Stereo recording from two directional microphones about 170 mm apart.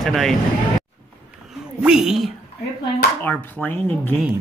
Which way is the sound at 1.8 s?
5° right (ahead or behind).